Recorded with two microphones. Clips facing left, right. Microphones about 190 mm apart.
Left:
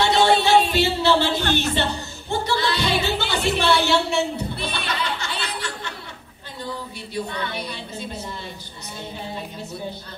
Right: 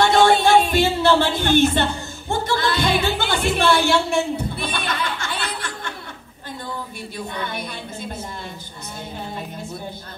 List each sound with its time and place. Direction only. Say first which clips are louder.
0.0 s a sound: right 3 dB; 50° right (ahead or behind)
1.5 s music: right 5 dB; 50° right (ahead or behind)
7.3 s a woman's voice: right 1 dB; 50° right (ahead or behind)